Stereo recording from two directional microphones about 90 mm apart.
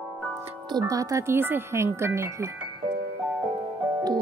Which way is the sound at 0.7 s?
40° right (ahead or behind).